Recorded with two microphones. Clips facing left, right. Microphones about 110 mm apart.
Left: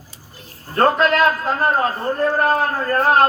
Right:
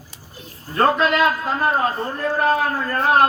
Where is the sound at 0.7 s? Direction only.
40° left (ahead or behind).